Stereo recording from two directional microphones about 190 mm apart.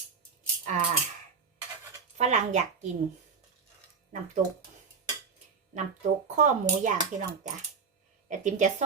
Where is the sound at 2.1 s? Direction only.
35° right (ahead or behind).